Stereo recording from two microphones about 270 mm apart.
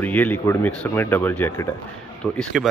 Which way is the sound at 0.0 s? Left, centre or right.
Centre.